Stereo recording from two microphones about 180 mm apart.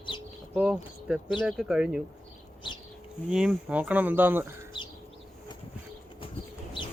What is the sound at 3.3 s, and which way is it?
Speech, 5° right (ahead or behind).